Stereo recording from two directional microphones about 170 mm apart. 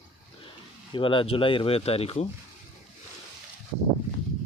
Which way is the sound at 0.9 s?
30° left (ahead or behind).